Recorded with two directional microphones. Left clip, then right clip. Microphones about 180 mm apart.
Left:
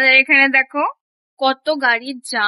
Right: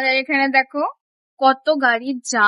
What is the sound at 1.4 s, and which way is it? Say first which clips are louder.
A woman's voice: right 1 dB; 40° right (ahead or behind).